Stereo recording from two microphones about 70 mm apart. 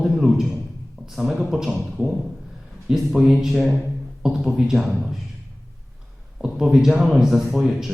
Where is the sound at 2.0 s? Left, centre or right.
Centre.